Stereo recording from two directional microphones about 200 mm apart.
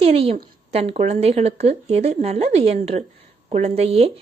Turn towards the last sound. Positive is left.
turn(degrees=-30)  # may be behind; listen again after turning